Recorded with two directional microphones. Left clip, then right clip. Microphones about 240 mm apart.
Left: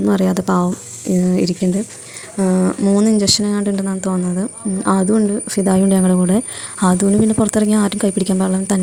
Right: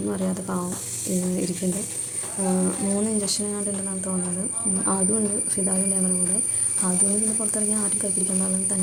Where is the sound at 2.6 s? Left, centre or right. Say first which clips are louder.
Left 10 dB; left.